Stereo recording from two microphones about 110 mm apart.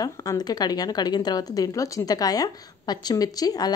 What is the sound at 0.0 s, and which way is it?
A woman's voice, 35° left (ahead or behind).